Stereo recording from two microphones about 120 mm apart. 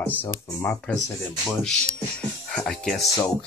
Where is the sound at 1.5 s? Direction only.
5° left (ahead or behind).